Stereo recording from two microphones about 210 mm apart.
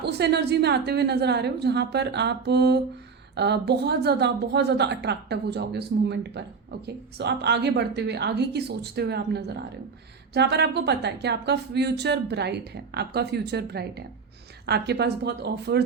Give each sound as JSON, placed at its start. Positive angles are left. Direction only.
{"t": 0.0, "sound": "speech", "side_deg": -50}